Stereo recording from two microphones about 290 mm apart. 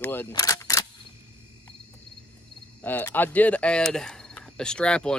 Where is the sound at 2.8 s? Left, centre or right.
Centre.